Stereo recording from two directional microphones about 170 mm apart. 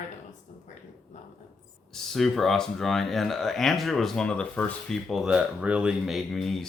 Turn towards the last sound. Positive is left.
turn(degrees=0)  # may be behind; listen again after turning